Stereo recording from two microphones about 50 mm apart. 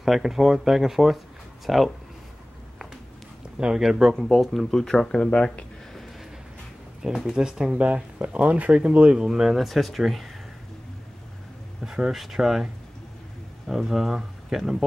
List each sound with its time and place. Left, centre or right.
0.0 s speech: centre
3.7 s speech: centre
4.2 s speech: centre
7.0 s speech: centre
9.2 s speech: centre
11.8 s speech: centre
13.7 s speech: centre